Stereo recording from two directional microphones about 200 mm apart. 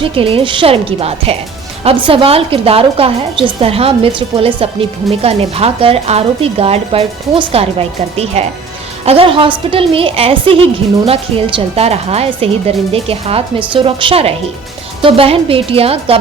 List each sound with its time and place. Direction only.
0.1 s a woman's voice: 25° right (ahead or behind)